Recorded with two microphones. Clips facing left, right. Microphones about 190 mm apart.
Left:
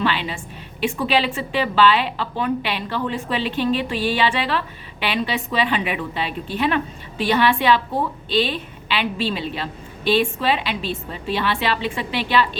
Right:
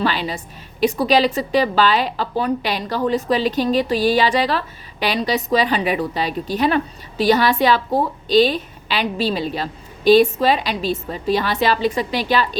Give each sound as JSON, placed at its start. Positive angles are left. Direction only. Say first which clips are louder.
{"t": 0.0, "sound": "a woman's voice", "louder": "right 2 dB", "side_deg": -40}